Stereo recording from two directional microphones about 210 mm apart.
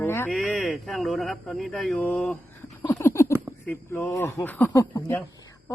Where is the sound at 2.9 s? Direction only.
10° left (ahead or behind).